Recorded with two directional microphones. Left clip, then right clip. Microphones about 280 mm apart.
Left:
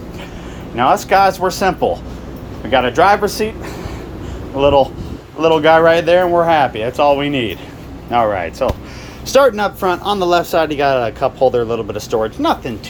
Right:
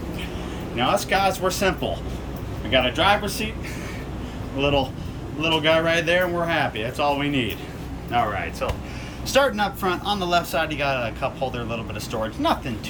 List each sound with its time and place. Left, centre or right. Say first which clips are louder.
0.8 s speech: left 9 dB; centre
4.5 s speech: left 11 dB; centre